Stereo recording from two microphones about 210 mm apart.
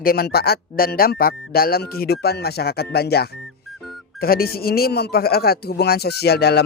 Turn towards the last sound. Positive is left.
turn(degrees=50)  # may be behind; listen again after turning